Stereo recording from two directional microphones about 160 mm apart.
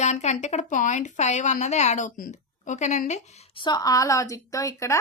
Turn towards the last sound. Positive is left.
turn(degrees=20)  # may be behind; listen again after turning